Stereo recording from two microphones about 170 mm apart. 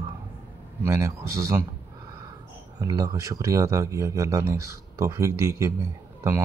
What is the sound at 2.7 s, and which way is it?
Speech, 20° right (ahead or behind).